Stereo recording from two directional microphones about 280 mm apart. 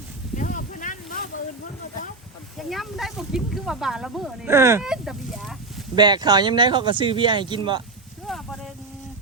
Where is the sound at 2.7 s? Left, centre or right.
Centre.